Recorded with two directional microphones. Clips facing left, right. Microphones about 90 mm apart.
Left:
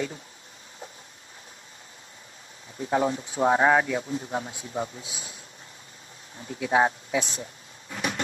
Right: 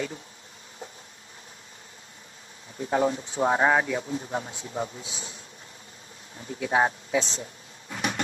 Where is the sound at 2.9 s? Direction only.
30° left (ahead or behind).